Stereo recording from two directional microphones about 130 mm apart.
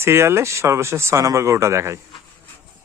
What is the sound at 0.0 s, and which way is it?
Speech, 20° right (ahead or behind).